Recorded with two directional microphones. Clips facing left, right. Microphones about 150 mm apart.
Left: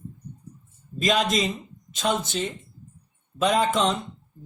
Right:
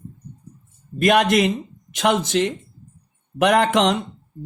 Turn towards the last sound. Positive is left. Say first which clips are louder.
# right 5 dB
turn(degrees=-85)